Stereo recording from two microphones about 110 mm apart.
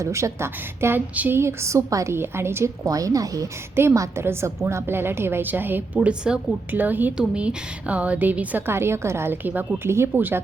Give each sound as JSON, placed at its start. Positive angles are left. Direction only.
{"t": 0.0, "sound": "a woman's voice", "side_deg": -25}